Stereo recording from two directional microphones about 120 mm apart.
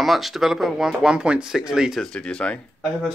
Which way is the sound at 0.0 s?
Centre (ahead or behind).